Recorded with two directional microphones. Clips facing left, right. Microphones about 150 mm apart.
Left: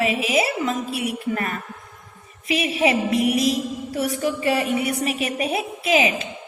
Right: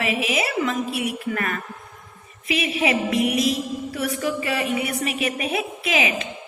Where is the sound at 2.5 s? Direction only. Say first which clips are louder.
Left 2 dB; 35° left (ahead or behind).